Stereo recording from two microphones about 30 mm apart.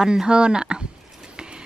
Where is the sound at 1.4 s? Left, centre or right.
Right.